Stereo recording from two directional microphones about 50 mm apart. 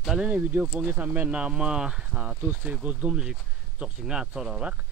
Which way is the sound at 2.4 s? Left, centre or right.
Right.